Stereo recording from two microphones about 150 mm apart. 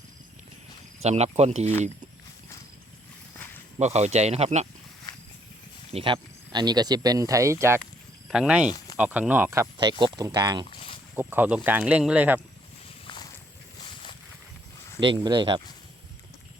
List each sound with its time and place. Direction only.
1.0 s speech: 45° right (ahead or behind)
3.3 s a sound: 10° left (ahead or behind)
3.8 s speech: 50° right (ahead or behind)
5.1 s a sound: 30° left (ahead or behind)
5.9 s speech: 35° right (ahead or behind); by 7.8 s 20° right (ahead or behind)
8.3 s speech: 5° right (ahead or behind)
9.7 s speech: 30° right (ahead or behind)
10.7 s a sound: 35° left (ahead or behind)
11.1 s speech: 15° right (ahead or behind)
13.1 s walk: 30° left (ahead or behind)
15.0 s speech: 30° right (ahead or behind)